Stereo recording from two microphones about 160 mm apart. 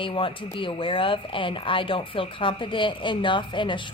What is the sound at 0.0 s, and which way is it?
Speech, 30° left (ahead or behind).